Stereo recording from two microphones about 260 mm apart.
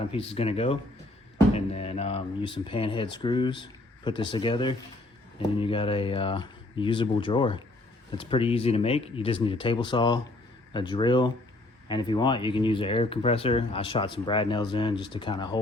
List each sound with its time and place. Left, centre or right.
0.1 s speech: left